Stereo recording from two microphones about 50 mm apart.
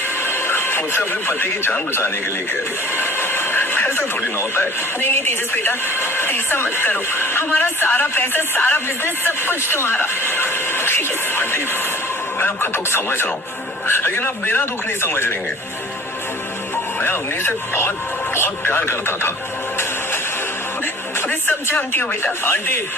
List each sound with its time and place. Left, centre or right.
0.2 s radio: left
2.9 s speech: left
7.5 s speech: left
17.0 s speech: left
21.8 s speech: left